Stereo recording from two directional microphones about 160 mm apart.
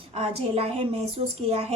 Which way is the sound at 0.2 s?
35° right (ahead or behind).